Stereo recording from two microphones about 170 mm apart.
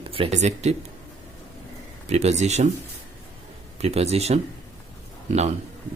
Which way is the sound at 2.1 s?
40° right (ahead or behind).